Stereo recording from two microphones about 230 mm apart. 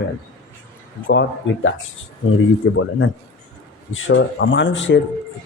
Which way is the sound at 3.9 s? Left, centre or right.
Left.